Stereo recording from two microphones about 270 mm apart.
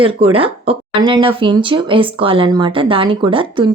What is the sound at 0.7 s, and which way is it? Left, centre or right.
Speech, centre.